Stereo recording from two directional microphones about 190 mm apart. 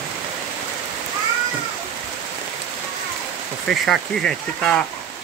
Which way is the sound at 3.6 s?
Centre (ahead or behind).